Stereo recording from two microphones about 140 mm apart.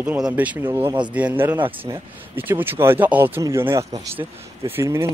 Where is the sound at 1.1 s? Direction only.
10° right (ahead or behind).